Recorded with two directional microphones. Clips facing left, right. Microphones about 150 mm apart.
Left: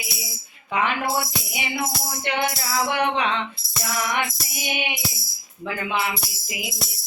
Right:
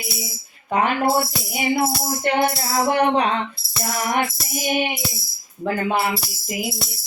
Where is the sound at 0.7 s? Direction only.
45° right (ahead or behind).